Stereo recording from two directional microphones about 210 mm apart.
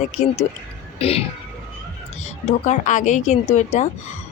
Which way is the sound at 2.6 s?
35° left (ahead or behind).